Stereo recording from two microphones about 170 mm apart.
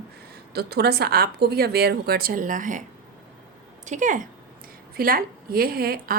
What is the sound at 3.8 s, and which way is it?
Speech, 45° right (ahead or behind).